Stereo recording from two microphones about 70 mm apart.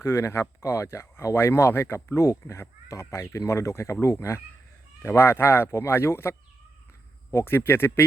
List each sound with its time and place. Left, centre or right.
0.0 s speech: left